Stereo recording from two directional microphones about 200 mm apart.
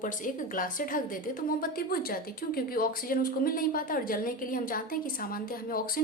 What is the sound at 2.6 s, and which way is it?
A woman's voice, 45° left (ahead or behind).